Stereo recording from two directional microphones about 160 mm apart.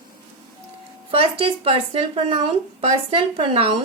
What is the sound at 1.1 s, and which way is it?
Speech, 35° right (ahead or behind).